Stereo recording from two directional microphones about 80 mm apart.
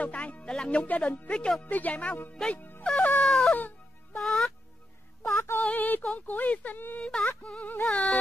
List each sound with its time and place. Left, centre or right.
0.0 s music: centre
1.6 s speech: centre
2.5 s music: left
2.8 s wail: centre
5.3 s music: left
5.6 s speech: centre
7.0 s music: centre